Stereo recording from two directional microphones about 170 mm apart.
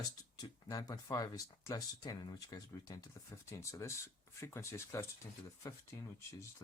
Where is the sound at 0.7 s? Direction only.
20° left (ahead or behind).